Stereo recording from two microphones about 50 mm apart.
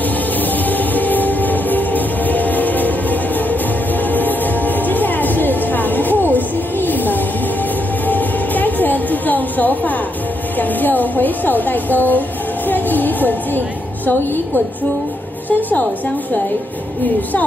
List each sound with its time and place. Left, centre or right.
0.7 s music: left
10.6 s a sound: left
12.6 s music: left